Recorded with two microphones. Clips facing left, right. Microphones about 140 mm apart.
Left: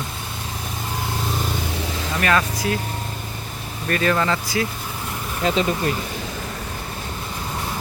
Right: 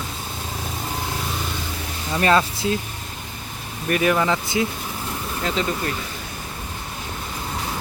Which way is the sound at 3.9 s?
15° right (ahead or behind).